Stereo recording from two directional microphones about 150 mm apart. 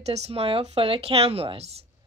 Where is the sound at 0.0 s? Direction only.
45° right (ahead or behind).